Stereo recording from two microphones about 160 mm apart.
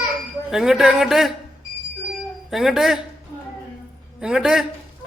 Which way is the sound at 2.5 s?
Centre (ahead or behind).